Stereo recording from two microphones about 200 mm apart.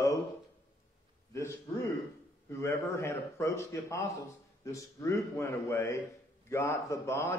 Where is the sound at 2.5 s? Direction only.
15° left (ahead or behind).